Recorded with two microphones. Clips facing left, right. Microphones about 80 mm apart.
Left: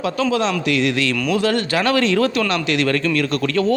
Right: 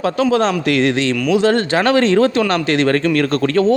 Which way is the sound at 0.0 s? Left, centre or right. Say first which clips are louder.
Right 4 dB; right.